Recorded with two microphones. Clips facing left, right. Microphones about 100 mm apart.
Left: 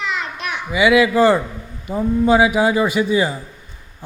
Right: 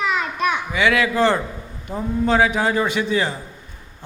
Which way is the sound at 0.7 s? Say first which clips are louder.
Left 8 dB; 5° left (ahead or behind).